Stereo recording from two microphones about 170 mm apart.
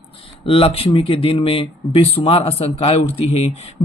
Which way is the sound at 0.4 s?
35° left (ahead or behind).